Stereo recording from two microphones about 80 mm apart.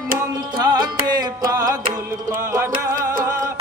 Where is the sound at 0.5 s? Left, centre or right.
Right.